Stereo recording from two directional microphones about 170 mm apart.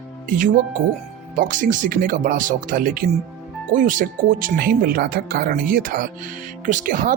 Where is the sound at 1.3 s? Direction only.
50° right (ahead or behind).